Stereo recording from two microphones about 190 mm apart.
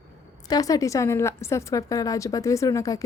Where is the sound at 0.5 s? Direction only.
20° left (ahead or behind).